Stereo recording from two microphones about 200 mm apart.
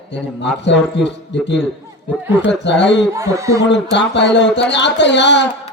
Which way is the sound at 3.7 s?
60° left (ahead or behind).